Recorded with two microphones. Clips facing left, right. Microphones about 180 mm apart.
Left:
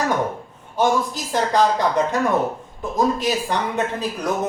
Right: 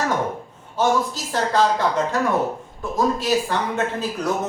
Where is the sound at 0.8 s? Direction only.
15° left (ahead or behind).